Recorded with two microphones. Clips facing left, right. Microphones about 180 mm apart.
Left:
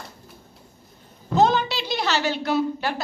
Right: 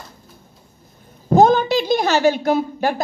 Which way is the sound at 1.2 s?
50° right (ahead or behind).